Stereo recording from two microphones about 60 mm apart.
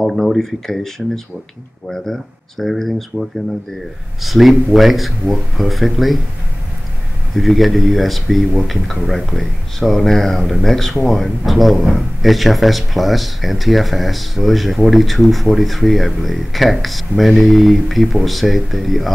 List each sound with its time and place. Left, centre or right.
0.0 s speech: centre
2.6 s speech: centre
7.3 s speech: centre